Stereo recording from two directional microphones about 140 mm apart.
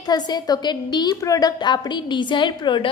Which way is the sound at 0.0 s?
30° left (ahead or behind).